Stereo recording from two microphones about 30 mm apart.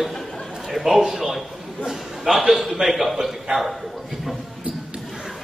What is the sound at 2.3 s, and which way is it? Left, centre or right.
Speech, centre.